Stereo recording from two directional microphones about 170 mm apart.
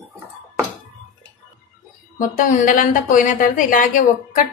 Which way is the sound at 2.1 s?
50° left (ahead or behind).